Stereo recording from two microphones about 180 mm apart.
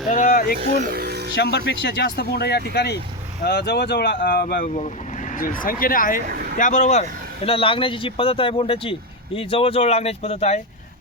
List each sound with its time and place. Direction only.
0.1 s a sound: 45° left (ahead or behind)
0.8 s music: 55° right (ahead or behind)
1.4 s speech: 70° left (ahead or behind); by 6.2 s 50° left (ahead or behind)
6.2 s speech: 55° right (ahead or behind)
6.6 s speech: 45° left (ahead or behind)
7.4 s speech: 30° left (ahead or behind)